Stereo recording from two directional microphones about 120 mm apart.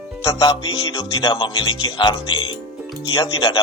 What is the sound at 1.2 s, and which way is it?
Speech, 50° left (ahead or behind).